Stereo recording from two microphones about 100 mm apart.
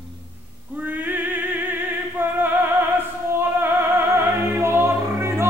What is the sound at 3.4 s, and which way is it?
Music, 20° right (ahead or behind).